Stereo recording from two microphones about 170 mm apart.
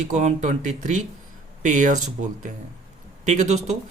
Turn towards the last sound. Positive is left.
turn(degrees=-40)  # may be behind; listen again after turning